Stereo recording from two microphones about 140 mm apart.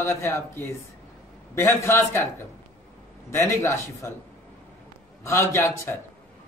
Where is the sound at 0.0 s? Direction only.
20° left (ahead or behind).